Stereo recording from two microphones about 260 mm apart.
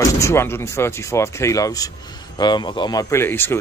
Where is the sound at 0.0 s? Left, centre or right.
Centre.